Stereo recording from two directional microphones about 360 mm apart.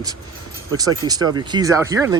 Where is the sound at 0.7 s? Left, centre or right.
Centre.